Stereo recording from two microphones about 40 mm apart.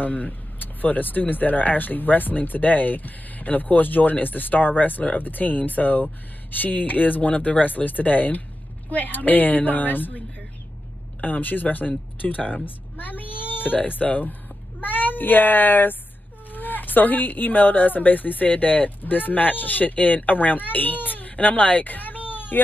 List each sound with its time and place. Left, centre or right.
0.0 s speech: left